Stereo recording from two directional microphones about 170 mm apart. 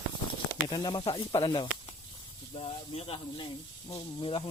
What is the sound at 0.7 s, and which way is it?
Speech, 25° left (ahead or behind).